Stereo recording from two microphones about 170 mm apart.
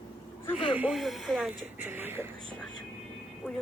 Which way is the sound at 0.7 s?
5° right (ahead or behind).